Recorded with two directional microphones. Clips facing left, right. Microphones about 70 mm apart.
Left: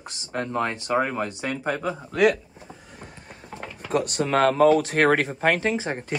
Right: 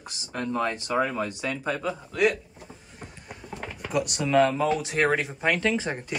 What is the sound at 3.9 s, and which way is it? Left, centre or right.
Speech, left.